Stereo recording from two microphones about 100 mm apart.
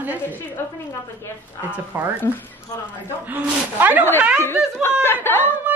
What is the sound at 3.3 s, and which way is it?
Speech, 20° right (ahead or behind).